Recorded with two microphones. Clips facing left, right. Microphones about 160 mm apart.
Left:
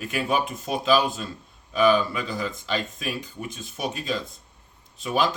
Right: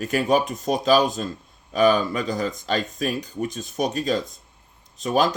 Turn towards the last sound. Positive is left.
turn(degrees=-45)  # may be behind; listen again after turning